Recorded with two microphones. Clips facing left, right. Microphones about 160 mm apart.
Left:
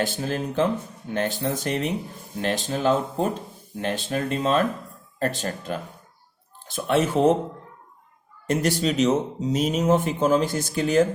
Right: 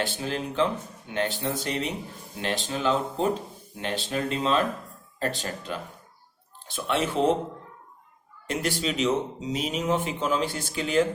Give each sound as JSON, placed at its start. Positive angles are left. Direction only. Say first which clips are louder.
{"t": 0.0, "sound": "speech", "louder": "left 3 dB", "side_deg": 45}
{"t": 8.4, "sound": "speech", "louder": "left 5 dB", "side_deg": 45}